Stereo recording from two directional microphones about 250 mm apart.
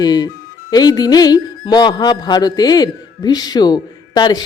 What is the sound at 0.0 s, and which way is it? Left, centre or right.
Speech, centre.